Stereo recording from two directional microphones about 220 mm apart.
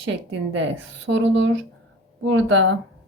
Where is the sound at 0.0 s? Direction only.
55° right (ahead or behind).